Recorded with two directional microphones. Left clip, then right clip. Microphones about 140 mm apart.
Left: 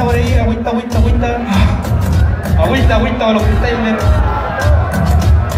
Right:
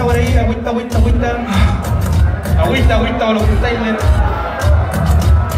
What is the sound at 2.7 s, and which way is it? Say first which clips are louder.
Speech: even; 15° right (ahead or behind).